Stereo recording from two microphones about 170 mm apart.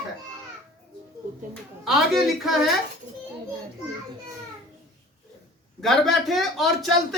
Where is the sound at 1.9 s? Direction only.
Centre (ahead or behind).